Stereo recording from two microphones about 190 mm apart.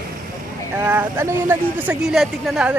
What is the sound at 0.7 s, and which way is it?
Speech, 10° right (ahead or behind).